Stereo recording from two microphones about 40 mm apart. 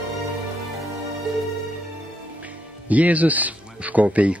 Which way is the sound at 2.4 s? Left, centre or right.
Right.